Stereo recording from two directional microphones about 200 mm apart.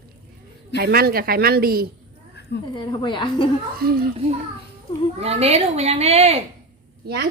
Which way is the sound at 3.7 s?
50° right (ahead or behind).